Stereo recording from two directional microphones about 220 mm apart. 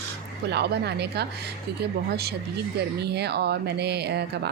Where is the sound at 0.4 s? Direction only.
50° right (ahead or behind).